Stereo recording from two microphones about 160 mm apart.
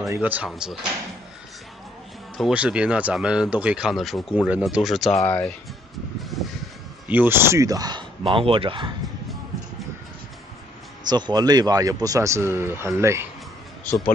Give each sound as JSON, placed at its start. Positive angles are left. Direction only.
{"t": 0.1, "sound": "speech", "side_deg": -10}
{"t": 2.3, "sound": "speech", "side_deg": -5}
{"t": 5.2, "sound": "speech", "side_deg": 10}
{"t": 7.1, "sound": "speech", "side_deg": -10}
{"t": 11.1, "sound": "speech", "side_deg": -25}
{"t": 13.9, "sound": "speech", "side_deg": 10}